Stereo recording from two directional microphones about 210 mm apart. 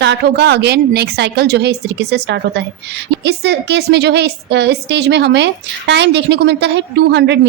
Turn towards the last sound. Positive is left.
turn(degrees=-55)  # may be behind; listen again after turning